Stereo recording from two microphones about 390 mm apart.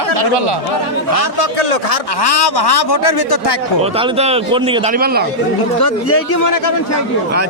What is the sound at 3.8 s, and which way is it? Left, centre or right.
A man's voice, centre.